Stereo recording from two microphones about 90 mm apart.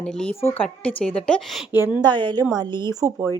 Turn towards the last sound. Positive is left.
turn(degrees=-35)  # may be behind; listen again after turning